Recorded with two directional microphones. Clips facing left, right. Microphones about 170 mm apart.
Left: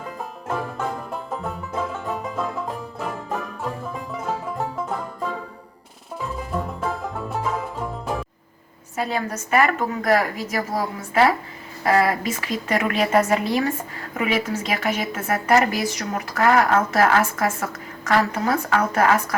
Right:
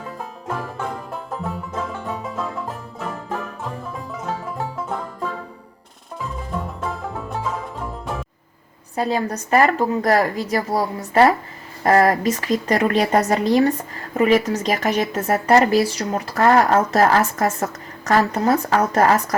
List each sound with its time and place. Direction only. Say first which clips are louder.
1.1 s music: right 1 dB; centre (ahead or behind)
6.8 s music: left 1 dB; centre (ahead or behind)
9.0 s speech: right 4 dB; 35° right (ahead or behind)